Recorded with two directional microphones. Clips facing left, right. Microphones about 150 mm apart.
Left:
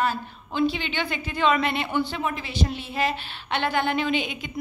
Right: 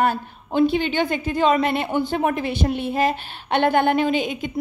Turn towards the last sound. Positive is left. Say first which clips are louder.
# right 4 dB
turn(degrees=-45)  # may be behind; listen again after turning